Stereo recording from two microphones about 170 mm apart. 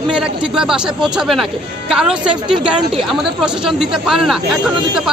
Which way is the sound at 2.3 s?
30° right (ahead or behind).